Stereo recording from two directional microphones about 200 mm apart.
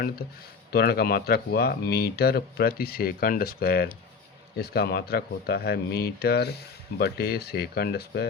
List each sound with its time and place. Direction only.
0.7 s speech: 50° left (ahead or behind)